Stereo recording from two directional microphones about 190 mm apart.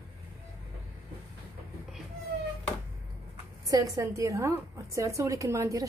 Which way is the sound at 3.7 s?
15° right (ahead or behind).